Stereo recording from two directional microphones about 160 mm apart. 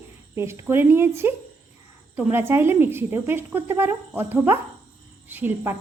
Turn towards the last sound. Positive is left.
turn(degrees=-10)  # may be behind; listen again after turning